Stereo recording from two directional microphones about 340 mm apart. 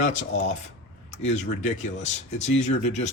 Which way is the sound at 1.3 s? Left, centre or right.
Left.